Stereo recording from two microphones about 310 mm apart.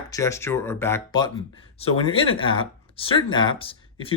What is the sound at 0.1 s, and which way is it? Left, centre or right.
Speech, centre.